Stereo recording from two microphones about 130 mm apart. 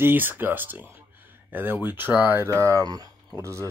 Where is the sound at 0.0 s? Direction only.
15° right (ahead or behind).